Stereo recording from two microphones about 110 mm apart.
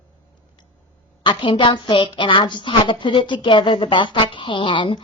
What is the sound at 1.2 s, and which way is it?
A woman's voice, 50° left (ahead or behind).